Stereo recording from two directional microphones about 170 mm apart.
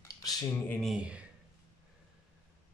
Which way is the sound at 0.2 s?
20° left (ahead or behind).